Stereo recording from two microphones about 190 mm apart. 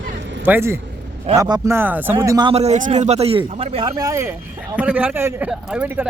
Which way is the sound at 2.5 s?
35° right (ahead or behind).